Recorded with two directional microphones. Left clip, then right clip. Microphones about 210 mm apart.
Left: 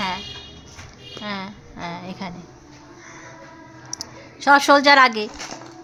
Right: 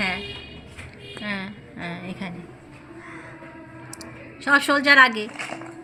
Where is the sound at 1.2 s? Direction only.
25° left (ahead or behind).